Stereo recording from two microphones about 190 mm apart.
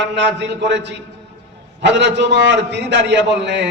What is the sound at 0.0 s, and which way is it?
A man's voice, 70° right (ahead or behind).